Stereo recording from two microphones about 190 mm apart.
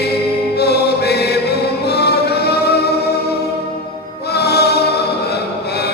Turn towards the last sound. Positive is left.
turn(degrees=60)  # may be behind; listen again after turning